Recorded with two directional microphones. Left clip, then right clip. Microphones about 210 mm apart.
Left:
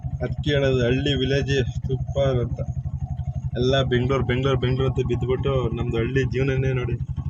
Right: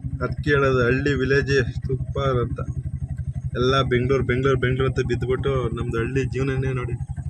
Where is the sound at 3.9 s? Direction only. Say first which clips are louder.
Right 2 dB; centre (ahead or behind).